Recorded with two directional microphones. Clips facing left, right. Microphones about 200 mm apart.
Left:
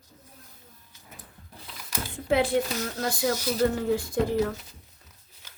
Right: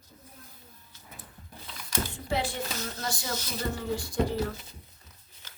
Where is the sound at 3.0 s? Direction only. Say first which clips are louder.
Left 11 dB; 60° left (ahead or behind).